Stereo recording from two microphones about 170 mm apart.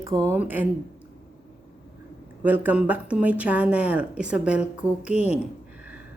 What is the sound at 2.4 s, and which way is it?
Speech, 10° right (ahead or behind).